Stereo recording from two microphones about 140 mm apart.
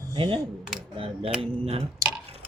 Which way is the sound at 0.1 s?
35° right (ahead or behind).